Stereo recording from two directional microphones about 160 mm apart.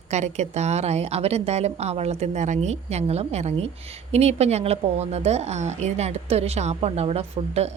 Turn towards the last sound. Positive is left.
turn(degrees=-40)  # may be behind; listen again after turning